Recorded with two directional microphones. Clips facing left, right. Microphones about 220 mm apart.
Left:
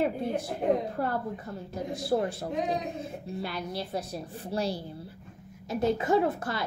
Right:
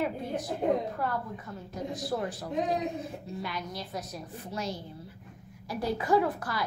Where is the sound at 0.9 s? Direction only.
30° left (ahead or behind).